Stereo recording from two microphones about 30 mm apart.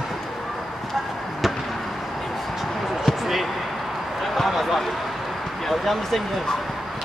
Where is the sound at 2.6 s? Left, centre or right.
Centre.